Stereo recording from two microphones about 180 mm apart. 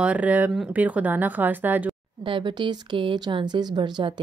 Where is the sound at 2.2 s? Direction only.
25° right (ahead or behind).